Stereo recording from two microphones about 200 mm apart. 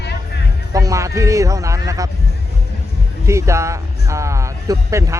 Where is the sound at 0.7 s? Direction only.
15° right (ahead or behind).